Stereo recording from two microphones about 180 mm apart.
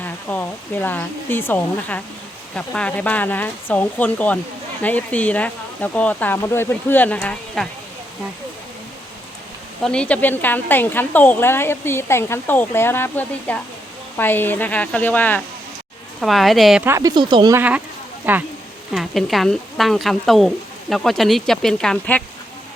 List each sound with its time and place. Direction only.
0.0 s speech: 10° left (ahead or behind)
9.8 s speech: 5° left (ahead or behind)
16.8 s speech: 15° right (ahead or behind)
17.5 s speech: 10° right (ahead or behind)